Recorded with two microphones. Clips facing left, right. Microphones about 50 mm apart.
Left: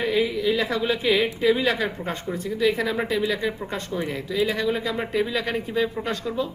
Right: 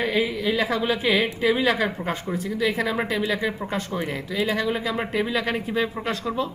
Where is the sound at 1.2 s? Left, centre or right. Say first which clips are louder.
Left 1 dB; right.